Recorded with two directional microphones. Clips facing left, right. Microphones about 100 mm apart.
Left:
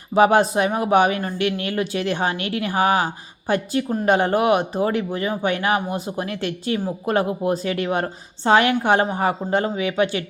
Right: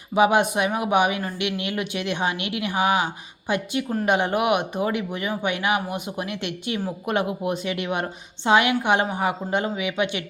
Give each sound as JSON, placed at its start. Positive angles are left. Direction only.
{"t": 0.1, "sound": "a woman's voice", "side_deg": 40}